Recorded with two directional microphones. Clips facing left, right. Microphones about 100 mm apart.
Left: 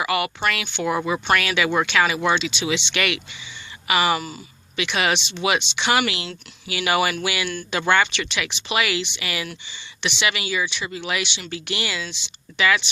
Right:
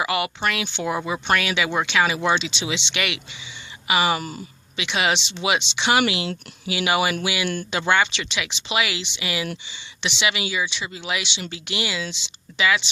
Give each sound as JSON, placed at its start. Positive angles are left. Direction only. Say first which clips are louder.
{"t": 0.0, "sound": "speech", "louder": "left 1 dB", "side_deg": -20}